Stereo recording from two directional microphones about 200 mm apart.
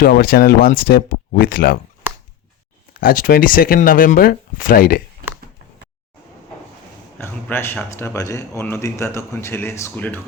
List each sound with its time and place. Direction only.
0.0 s speech: 50° left (ahead or behind)
3.0 s speech: 45° left (ahead or behind)
7.2 s a man's voice: 10° left (ahead or behind)